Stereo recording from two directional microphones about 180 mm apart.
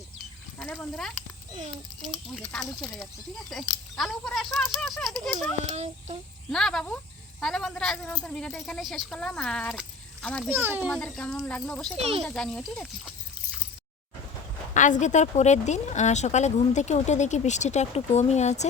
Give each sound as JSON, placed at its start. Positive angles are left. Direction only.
{"t": 0.6, "sound": "speech", "side_deg": 10}
{"t": 2.4, "sound": "speech", "side_deg": 5}
{"t": 5.6, "sound": "speech", "side_deg": -35}
{"t": 6.5, "sound": "speech", "side_deg": 0}
{"t": 10.5, "sound": "a child's voice", "side_deg": -10}
{"t": 10.9, "sound": "speech", "side_deg": 5}
{"t": 11.9, "sound": "speech", "side_deg": -35}
{"t": 12.2, "sound": "speech", "side_deg": 5}
{"t": 14.7, "sound": "speech", "side_deg": 45}